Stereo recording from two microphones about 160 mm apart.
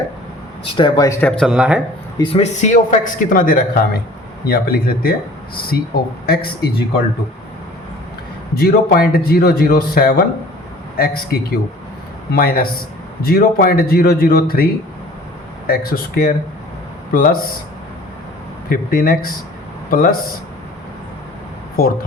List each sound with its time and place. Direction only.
0.8 s a man's voice: 25° left (ahead or behind)
1.5 s speech: 5° right (ahead or behind)
2.1 s a man's voice: 35° left (ahead or behind); by 6.8 s 75° left (ahead or behind)
8.5 s a man's voice: 70° left (ahead or behind)
18.7 s speech: 65° left (ahead or behind)